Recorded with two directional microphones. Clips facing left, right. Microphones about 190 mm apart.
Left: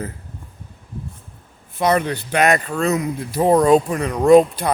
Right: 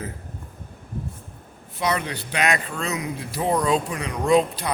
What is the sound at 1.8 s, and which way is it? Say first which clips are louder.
Speech: left 7 dB; 50° left (ahead or behind).